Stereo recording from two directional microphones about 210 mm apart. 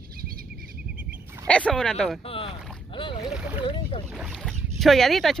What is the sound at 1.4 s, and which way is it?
Speech, 5° left (ahead or behind).